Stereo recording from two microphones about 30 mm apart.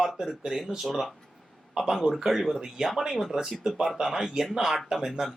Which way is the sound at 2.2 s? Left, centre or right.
Centre.